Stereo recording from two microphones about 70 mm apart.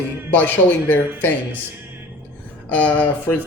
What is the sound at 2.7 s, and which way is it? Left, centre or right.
Speech, left.